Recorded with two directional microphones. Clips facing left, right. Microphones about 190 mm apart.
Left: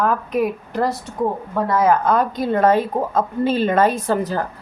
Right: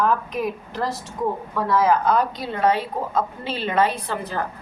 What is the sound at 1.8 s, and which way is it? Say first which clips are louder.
A woman's voice: left 2 dB; 50° left (ahead or behind).